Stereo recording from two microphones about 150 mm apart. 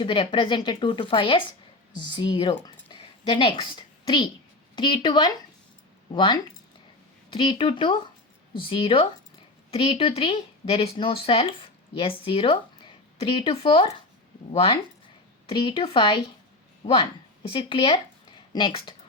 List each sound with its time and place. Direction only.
0.0 s speech: 35° left (ahead or behind)
2.6 s a sound: 35° left (ahead or behind)
4.7 s speech: 30° left (ahead or behind)